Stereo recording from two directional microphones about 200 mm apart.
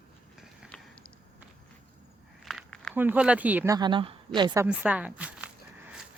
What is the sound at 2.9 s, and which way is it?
A woman's voice, 10° right (ahead or behind).